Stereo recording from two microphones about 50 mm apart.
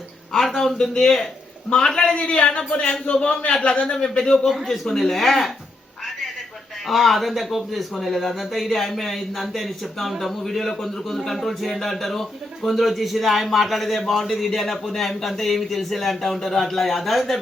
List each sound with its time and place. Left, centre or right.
0.3 s speech: centre
2.1 s a man's voice: left
4.2 s a man's voice: centre
6.8 s a man's voice: centre